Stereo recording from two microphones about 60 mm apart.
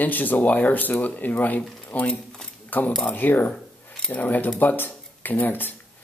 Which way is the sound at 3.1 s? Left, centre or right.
Left.